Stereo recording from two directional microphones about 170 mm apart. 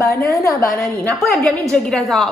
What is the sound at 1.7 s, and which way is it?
Speech, 5° left (ahead or behind).